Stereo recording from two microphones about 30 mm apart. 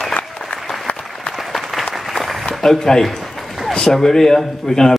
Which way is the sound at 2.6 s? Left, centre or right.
Centre.